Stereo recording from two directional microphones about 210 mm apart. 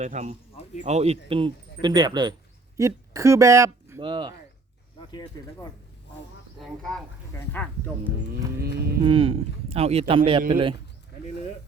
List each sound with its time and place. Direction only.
0.0 s speech: 35° right (ahead or behind)
5.1 s speech: 20° left (ahead or behind)
6.6 s speech: 5° left (ahead or behind)
9.0 s speech: 25° right (ahead or behind)